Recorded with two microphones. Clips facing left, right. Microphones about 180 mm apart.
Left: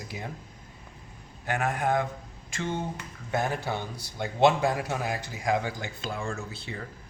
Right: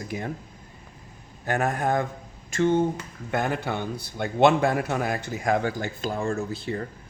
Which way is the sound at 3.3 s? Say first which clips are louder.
Right 2 dB; 60° right (ahead or behind).